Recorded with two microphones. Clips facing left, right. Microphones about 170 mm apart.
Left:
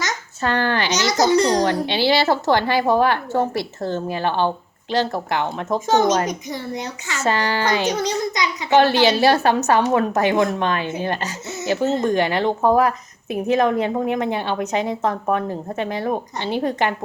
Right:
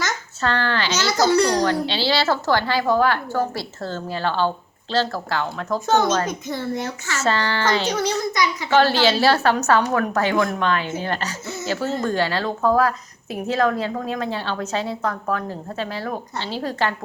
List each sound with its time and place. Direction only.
0.0 s a child's voice: 15° left (ahead or behind)